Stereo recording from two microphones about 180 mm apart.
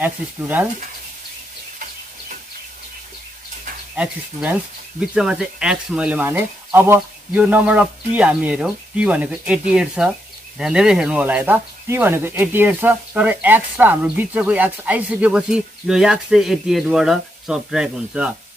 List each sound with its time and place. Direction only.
0.0 s speech: 10° right (ahead or behind)
3.9 s speech: 5° right (ahead or behind)